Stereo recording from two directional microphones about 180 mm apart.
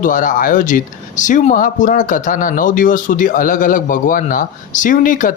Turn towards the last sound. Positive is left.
turn(degrees=50)  # may be behind; listen again after turning